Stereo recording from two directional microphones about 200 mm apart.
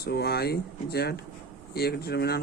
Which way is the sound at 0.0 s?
55° left (ahead or behind).